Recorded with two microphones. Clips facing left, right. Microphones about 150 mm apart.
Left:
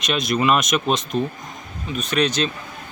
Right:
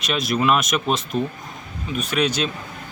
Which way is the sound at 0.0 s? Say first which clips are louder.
Left 1 dB; 5° right (ahead or behind).